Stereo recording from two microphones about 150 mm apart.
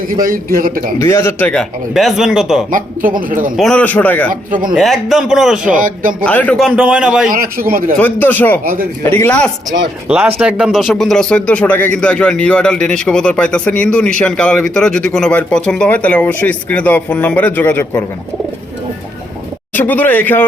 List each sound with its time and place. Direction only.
0.2 s a man's voice: 70° right (ahead or behind)
0.9 s speech: 15° left (ahead or behind)
1.9 s a man's voice: centre (ahead or behind)
2.6 s speech: 65° right (ahead or behind)
3.5 s speech: 5° left (ahead or behind)
4.3 s speech: 65° right (ahead or behind)
4.7 s a man's voice: centre (ahead or behind)
5.7 s speech: 65° right (ahead or behind)
6.2 s speech: 10° left (ahead or behind)
6.6 s a man's voice: 5° right (ahead or behind)
7.3 s a man's voice: 70° right (ahead or behind)
7.9 s speech: 10° left (ahead or behind)
10.1 s speech: 10° right (ahead or behind); by 18.0 s 15° left (ahead or behind)
19.7 s speech: 10° left (ahead or behind)